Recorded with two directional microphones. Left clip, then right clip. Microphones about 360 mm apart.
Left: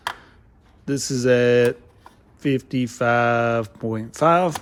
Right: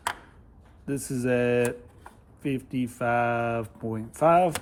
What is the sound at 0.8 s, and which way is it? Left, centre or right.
Speech, centre.